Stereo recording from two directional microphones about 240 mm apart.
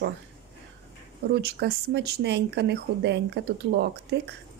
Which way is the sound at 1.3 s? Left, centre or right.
Right.